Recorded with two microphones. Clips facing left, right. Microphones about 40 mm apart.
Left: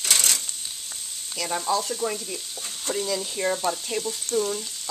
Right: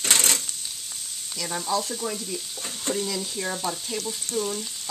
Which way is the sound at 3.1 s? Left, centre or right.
Centre.